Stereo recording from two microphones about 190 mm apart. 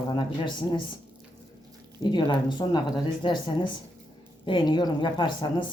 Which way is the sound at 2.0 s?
25° left (ahead or behind).